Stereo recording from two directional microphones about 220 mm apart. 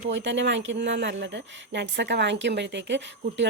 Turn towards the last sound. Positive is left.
turn(degrees=-55)  # may be behind; listen again after turning